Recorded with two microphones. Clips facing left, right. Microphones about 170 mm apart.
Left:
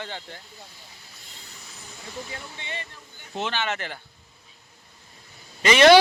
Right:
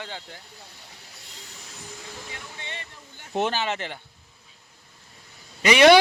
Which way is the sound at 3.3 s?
55° right (ahead or behind).